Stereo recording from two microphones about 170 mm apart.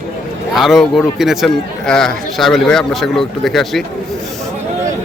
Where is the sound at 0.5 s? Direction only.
Centre (ahead or behind).